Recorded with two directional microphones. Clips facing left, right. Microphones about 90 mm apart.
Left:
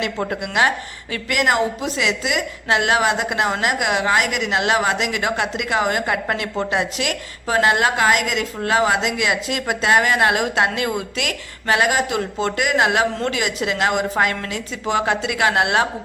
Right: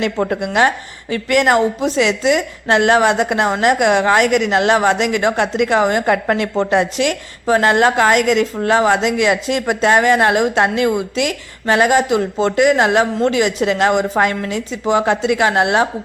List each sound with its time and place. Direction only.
0.0 s a woman's voice: 35° right (ahead or behind)